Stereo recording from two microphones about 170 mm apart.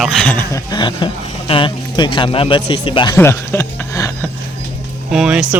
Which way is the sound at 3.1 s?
15° left (ahead or behind).